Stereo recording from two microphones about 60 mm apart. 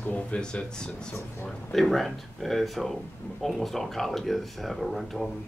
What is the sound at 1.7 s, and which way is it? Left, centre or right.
Speech, centre.